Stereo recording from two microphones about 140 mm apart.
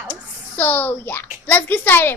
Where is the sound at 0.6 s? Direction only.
15° left (ahead or behind).